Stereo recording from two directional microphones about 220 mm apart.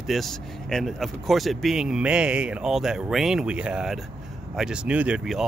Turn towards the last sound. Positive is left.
turn(degrees=-5)  # may be behind; listen again after turning